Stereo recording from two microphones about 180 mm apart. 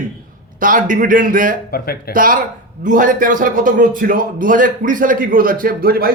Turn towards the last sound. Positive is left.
turn(degrees=-55)  # may be behind; listen again after turning